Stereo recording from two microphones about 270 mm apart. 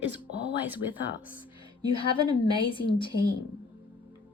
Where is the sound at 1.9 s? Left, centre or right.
Centre.